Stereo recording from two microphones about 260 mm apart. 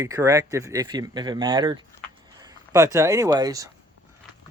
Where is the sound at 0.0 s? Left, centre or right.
Centre.